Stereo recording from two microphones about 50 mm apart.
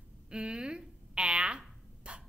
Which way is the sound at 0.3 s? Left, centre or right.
Centre.